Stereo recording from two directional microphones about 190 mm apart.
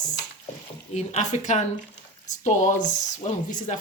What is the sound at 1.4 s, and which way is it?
Speech, 40° left (ahead or behind).